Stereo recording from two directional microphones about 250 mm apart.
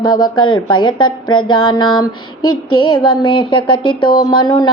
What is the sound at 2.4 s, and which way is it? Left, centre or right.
Speech, left.